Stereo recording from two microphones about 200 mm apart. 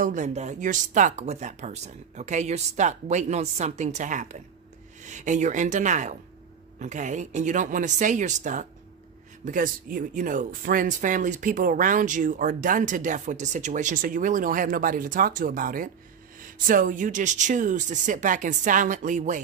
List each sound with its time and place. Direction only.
0.0 s speech: 35° right (ahead or behind)